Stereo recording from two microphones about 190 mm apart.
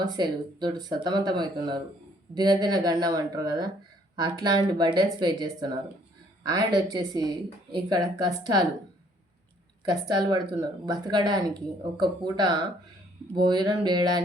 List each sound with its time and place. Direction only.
0.0 s speech: 20° right (ahead or behind)
9.9 s speech: 20° right (ahead or behind)